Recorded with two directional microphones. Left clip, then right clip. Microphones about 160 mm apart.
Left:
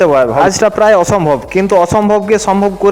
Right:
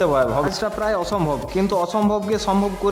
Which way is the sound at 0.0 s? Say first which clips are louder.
Left 9 dB; 30° left (ahead or behind).